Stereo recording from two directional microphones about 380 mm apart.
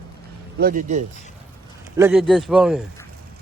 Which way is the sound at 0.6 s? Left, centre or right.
Right.